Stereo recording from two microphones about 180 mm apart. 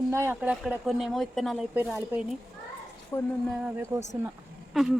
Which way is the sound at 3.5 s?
5° right (ahead or behind).